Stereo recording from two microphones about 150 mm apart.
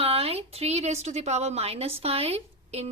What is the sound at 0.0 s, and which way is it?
A woman's voice, 40° right (ahead or behind).